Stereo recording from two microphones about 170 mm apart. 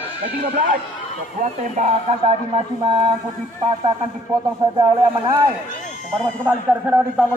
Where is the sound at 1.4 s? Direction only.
45° right (ahead or behind).